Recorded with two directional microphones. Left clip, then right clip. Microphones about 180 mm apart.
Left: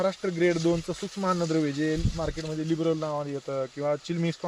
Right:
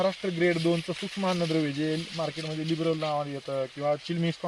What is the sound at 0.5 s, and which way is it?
Speech, 10° left (ahead or behind).